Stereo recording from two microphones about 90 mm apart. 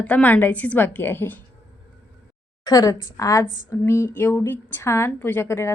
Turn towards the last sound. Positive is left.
turn(degrees=30)  # may be behind; listen again after turning